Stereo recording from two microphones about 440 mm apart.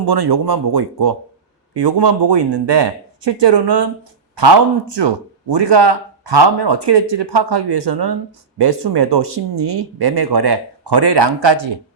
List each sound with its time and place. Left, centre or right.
0.0 s speech: right